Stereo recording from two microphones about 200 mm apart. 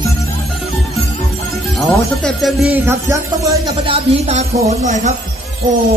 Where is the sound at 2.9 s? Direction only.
15° right (ahead or behind).